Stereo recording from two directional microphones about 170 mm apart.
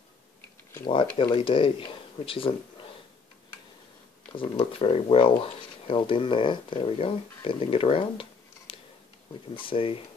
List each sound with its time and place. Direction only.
0.7 s speech: 30° left (ahead or behind)
4.4 s speech: 35° left (ahead or behind)